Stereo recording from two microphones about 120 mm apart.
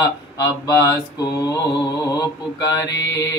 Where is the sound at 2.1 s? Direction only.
30° left (ahead or behind).